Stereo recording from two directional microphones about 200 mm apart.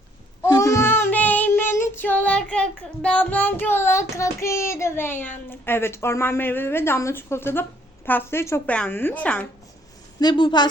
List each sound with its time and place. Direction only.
0.4 s child singing: 15° left (ahead or behind)
8.0 s a woman's voice: 10° left (ahead or behind)
10.2 s a woman's voice: 20° left (ahead or behind)